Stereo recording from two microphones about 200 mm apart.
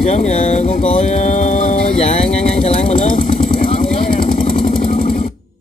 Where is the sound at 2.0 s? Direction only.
30° left (ahead or behind).